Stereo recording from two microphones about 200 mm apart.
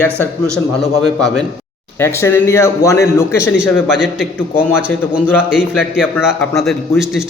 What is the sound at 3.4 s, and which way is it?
Speech, 5° right (ahead or behind).